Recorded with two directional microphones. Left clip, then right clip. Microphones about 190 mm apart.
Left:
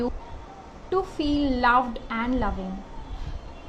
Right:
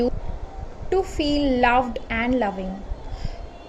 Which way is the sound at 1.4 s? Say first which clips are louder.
Right 2 dB; 25° left (ahead or behind).